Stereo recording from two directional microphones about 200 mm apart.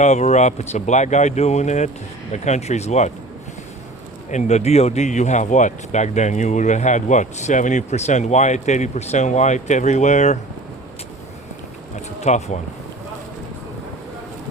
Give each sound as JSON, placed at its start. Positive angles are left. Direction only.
{"t": 0.0, "sound": "speech", "side_deg": 35}
{"t": 4.3, "sound": "speech", "side_deg": 35}
{"t": 12.2, "sound": "speech", "side_deg": 35}